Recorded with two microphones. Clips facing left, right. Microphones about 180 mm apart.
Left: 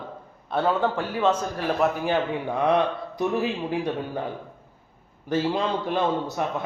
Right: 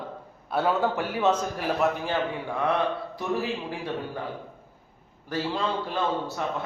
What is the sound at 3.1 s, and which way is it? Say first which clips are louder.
Speech: left 7 dB; 20° left (ahead or behind).